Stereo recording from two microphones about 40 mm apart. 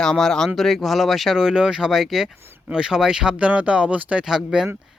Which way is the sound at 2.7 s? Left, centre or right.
Centre.